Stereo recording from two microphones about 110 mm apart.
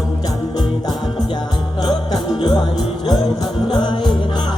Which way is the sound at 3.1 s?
40° left (ahead or behind).